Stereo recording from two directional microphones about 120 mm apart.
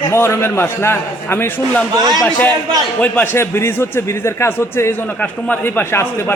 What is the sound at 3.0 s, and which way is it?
A man's voice, 15° left (ahead or behind).